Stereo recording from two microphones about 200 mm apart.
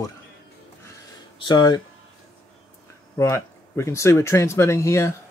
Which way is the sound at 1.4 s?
20° left (ahead or behind).